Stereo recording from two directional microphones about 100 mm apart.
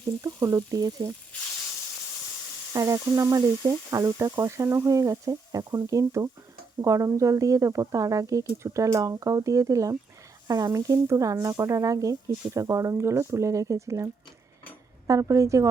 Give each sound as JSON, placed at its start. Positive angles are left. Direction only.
{"t": 0.2, "sound": "speech", "side_deg": -30}
{"t": 2.7, "sound": "speech", "side_deg": -35}